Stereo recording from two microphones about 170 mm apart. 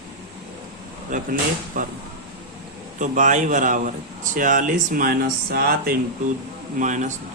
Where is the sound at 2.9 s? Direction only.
50° right (ahead or behind); by 5.9 s 65° right (ahead or behind).